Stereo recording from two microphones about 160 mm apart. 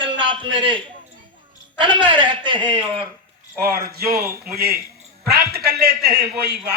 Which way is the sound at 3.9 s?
75° right (ahead or behind).